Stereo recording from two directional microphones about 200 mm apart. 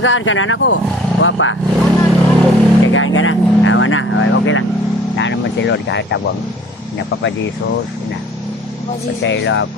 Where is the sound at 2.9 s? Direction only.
80° left.